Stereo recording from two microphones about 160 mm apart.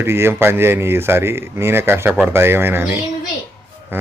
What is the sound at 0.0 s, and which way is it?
Speech, 15° right (ahead or behind).